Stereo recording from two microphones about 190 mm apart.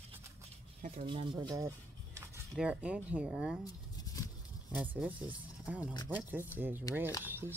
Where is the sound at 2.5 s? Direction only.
5° right (ahead or behind).